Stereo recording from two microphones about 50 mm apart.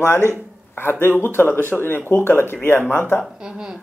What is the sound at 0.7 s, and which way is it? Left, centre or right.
Speech, left.